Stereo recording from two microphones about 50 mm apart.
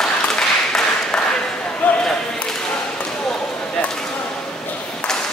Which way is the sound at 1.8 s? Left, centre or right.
Left.